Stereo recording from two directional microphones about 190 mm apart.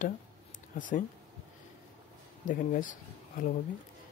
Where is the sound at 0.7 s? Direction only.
45° left (ahead or behind).